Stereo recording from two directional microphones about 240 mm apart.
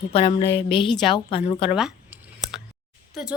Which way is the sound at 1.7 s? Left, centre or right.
Centre.